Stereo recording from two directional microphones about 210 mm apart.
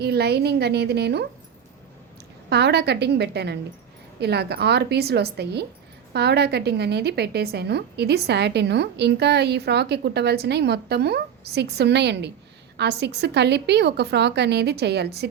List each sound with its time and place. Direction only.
0.0 s a woman's voice: 50° right (ahead or behind)
2.5 s a woman's voice: 50° right (ahead or behind)